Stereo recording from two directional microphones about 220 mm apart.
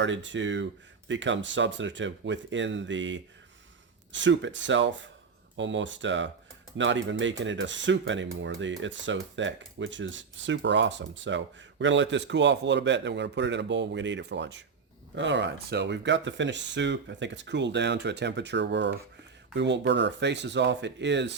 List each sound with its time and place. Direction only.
0.0 s speech: 55° right (ahead or behind)